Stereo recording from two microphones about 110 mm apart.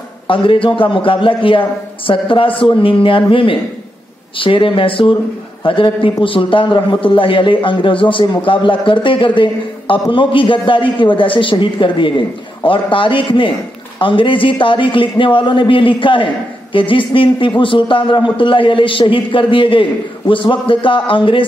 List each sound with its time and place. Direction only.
0.3 s a man's voice: 55° left (ahead or behind)